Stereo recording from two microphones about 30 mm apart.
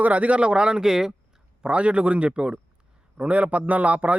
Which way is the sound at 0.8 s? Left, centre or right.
Centre.